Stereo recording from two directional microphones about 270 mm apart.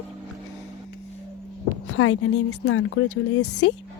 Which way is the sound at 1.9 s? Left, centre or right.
Left.